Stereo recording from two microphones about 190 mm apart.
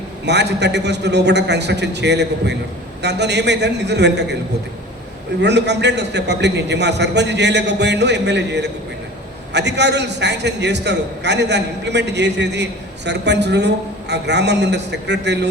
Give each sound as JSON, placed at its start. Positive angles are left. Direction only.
{"t": 0.3, "sound": "a man's voice", "side_deg": -65}
{"t": 5.4, "sound": "a man's voice", "side_deg": -65}